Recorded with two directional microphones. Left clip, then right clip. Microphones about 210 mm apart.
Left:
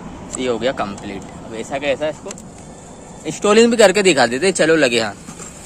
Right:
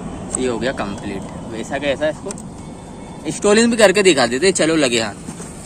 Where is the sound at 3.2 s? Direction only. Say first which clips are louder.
Left 2 dB; 40° left (ahead or behind).